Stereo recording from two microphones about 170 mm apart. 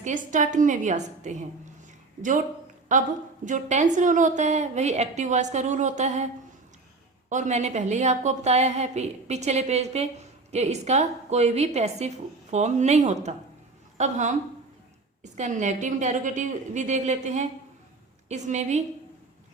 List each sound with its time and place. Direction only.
0.0 s a woman's voice: 50° right (ahead or behind)
2.9 s a woman's voice: 45° right (ahead or behind)
7.3 s a woman's voice: 45° right (ahead or behind)